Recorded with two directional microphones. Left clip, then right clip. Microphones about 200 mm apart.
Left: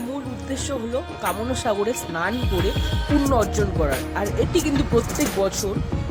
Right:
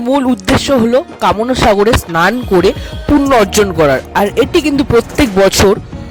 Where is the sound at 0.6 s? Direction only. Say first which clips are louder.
Right 13 dB; 40° right (ahead or behind).